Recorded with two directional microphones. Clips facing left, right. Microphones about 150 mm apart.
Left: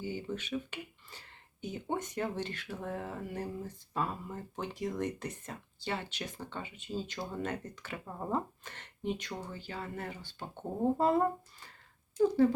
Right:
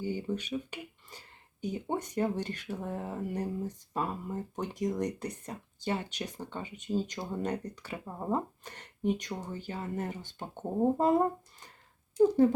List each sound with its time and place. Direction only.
0.1 s speech: 15° right (ahead or behind)
12.1 s speech: 20° right (ahead or behind)